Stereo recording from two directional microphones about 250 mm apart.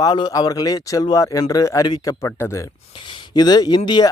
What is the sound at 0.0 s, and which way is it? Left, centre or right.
Speech, centre.